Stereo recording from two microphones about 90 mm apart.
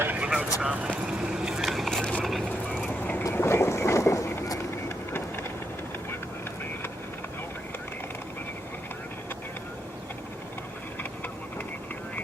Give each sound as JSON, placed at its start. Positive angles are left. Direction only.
{"t": 0.0, "sound": "vehicle", "side_deg": -15}
{"t": 0.6, "sound": "speech", "side_deg": -10}
{"t": 0.9, "sound": "vehicle", "side_deg": -10}
{"t": 3.0, "sound": "boat", "side_deg": 20}